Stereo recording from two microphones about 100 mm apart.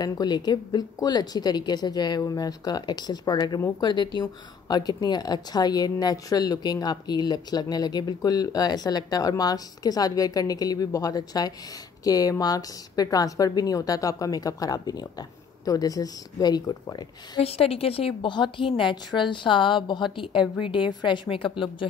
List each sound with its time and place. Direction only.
0.0 s a woman's voice: 45° left (ahead or behind)
17.4 s a woman's voice: 75° left (ahead or behind); by 21.8 s 60° left (ahead or behind)